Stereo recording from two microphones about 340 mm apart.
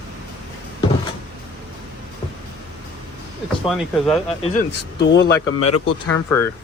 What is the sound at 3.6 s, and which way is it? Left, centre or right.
Speech, centre.